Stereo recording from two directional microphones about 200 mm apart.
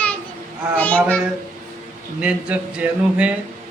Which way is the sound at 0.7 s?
5° left (ahead or behind).